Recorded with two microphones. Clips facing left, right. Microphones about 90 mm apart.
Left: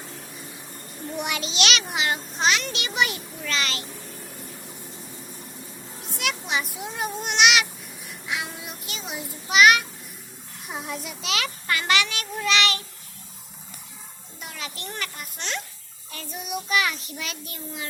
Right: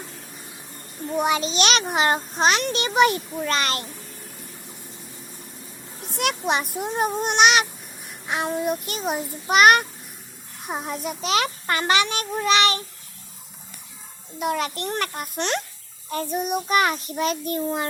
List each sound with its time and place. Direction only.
1.1 s a child's voice: 35° right (ahead or behind)
6.1 s a child's voice: 50° right (ahead or behind)
14.3 s a child's voice: 55° right (ahead or behind)
16.0 s child singing: 40° right (ahead or behind)